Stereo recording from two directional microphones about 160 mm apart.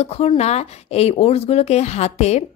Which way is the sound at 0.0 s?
40° left (ahead or behind).